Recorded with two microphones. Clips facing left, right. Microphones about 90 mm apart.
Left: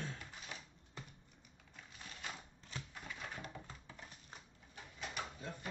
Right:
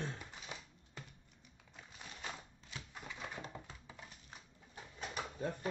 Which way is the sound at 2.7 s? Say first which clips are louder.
Even; 15° right (ahead or behind).